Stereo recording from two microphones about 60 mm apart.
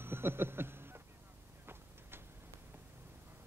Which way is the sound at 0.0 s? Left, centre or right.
Right.